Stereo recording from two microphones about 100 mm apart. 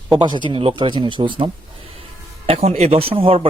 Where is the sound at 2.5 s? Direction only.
90° right; by 3.5 s 70° right (ahead or behind).